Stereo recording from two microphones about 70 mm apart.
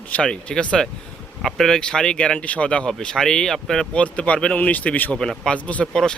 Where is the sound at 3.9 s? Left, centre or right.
Centre.